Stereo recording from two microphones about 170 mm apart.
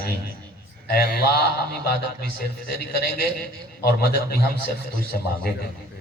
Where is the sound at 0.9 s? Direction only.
65° left (ahead or behind).